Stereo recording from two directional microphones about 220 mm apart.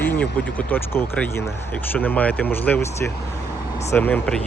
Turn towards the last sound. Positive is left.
turn(degrees=5)  # may be behind; listen again after turning